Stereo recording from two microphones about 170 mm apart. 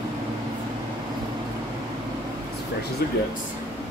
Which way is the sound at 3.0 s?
65° left (ahead or behind).